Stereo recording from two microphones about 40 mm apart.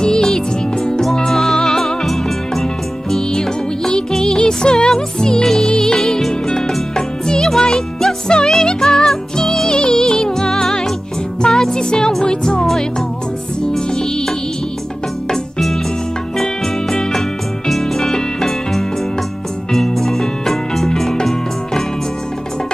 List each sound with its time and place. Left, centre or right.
0.0 s music: centre
5.4 s music: centre
16.9 s music: centre
17.6 s music: centre